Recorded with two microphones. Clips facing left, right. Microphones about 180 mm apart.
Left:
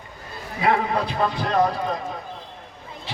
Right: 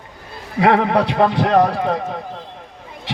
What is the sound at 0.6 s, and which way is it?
A man's voice, 75° right (ahead or behind).